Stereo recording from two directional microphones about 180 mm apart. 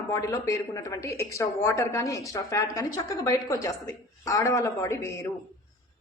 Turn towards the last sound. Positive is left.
turn(degrees=15)  # may be behind; listen again after turning